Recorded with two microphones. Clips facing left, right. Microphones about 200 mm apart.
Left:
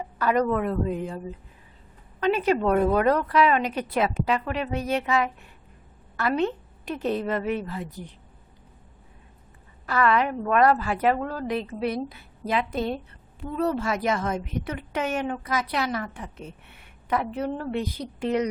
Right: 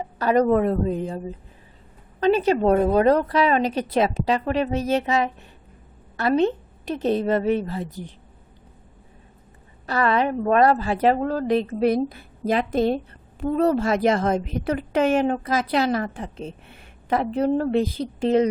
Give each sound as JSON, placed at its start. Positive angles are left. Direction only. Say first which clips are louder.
{"t": 0.0, "sound": "a woman's voice", "louder": "right 4 dB", "side_deg": -30}
{"t": 2.2, "sound": "a woman's voice", "louder": "right 4 dB", "side_deg": -35}
{"t": 9.8, "sound": "a woman's voice", "louder": "right 1 dB", "side_deg": -30}
{"t": 11.9, "sound": "a woman's voice", "louder": "right 8 dB", "side_deg": -50}
{"t": 13.7, "sound": "a woman's voice", "louder": "right 6 dB", "side_deg": -35}